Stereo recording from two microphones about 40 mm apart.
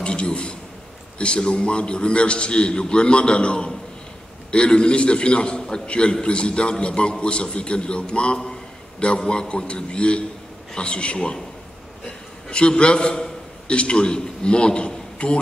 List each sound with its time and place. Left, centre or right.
0.0 s a man's voice: left
12.4 s a man's voice: left